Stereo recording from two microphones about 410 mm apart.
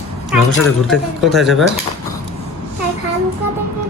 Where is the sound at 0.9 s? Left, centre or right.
Centre.